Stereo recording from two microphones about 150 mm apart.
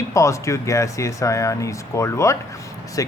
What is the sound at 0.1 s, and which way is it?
Speech, 20° left (ahead or behind).